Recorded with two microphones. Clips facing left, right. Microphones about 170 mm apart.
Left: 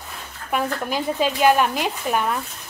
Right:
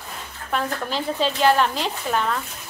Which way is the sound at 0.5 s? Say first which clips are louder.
Left 2 dB; 10° left (ahead or behind).